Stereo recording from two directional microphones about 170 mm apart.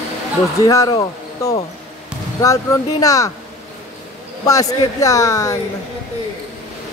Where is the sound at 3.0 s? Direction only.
20° left (ahead or behind).